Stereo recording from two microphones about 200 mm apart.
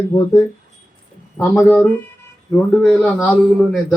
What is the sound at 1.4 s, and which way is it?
A man's voice, 10° left (ahead or behind).